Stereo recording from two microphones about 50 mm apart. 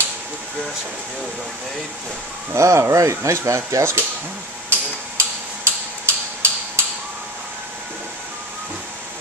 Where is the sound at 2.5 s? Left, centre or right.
Right.